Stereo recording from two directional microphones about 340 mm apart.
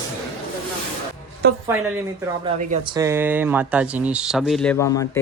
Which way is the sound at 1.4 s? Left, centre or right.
Right.